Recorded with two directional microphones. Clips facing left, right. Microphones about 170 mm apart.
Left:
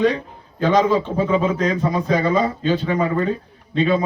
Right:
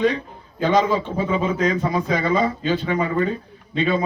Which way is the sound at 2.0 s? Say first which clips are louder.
Left 3 dB; 40° left (ahead or behind).